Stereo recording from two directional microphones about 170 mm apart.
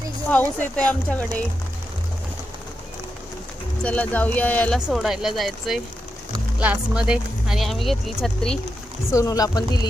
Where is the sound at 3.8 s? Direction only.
10° left (ahead or behind).